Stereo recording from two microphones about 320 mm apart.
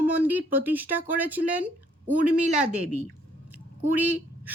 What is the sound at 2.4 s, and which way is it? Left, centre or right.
Speech, right.